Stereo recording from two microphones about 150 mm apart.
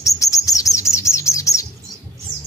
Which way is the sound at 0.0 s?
20° left (ahead or behind).